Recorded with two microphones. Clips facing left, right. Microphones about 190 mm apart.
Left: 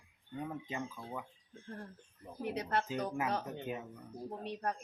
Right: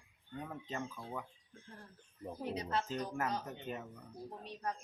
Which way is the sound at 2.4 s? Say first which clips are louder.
Left 3 dB; 60° left (ahead or behind).